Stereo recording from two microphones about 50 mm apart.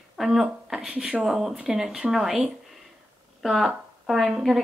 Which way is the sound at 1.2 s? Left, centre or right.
Centre.